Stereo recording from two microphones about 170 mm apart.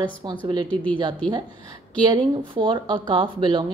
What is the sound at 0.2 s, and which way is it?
Speech, 25° right (ahead or behind).